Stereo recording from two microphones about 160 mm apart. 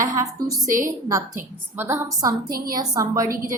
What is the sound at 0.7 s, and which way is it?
Speech, 60° right (ahead or behind).